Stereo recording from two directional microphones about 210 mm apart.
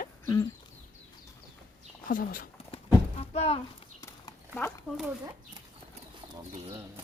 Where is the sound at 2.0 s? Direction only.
40° left (ahead or behind).